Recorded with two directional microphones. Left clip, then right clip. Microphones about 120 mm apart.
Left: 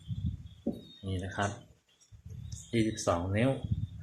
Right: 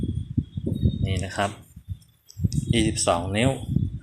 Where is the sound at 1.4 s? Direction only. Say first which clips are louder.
Right 8 dB; 25° right (ahead or behind).